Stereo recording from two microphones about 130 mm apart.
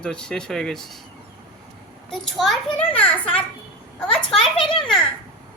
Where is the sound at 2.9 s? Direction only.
10° left (ahead or behind).